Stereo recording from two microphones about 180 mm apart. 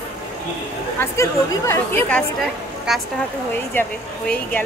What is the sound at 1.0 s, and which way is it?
Speech, 15° left (ahead or behind).